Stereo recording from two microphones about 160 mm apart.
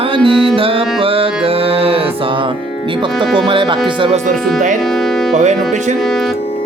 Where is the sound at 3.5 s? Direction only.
30° right (ahead or behind).